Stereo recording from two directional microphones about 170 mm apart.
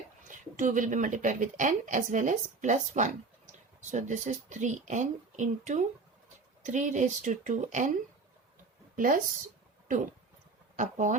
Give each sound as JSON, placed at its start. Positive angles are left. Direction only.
{"t": 0.3, "sound": "a woman's voice", "side_deg": -50}
{"t": 9.0, "sound": "speech", "side_deg": -55}
{"t": 10.8, "sound": "a woman's voice", "side_deg": -45}